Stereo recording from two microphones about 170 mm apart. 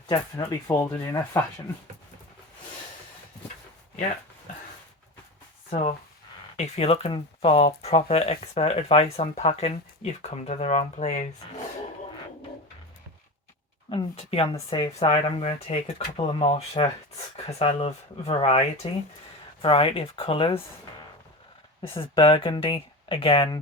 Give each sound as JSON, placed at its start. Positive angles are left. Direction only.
{"t": 0.1, "sound": "speech", "side_deg": 25}
{"t": 6.6, "sound": "speech", "side_deg": 35}
{"t": 13.9, "sound": "speech", "side_deg": 35}
{"t": 21.9, "sound": "speech", "side_deg": 30}